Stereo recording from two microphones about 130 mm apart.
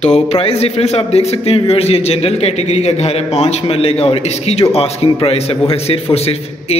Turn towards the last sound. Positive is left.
turn(degrees=50)  # may be behind; listen again after turning